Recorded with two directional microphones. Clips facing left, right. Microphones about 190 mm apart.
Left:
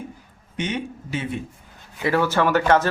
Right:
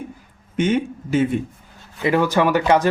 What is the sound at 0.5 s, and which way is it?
Speech, 50° right (ahead or behind).